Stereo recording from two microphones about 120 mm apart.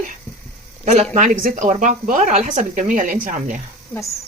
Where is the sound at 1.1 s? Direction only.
90° right.